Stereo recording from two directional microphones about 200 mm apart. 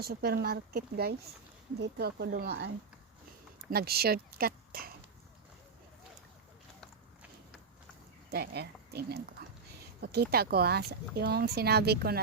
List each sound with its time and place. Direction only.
0.0 s speech: 50° right (ahead or behind)
8.3 s speech: 50° right (ahead or behind)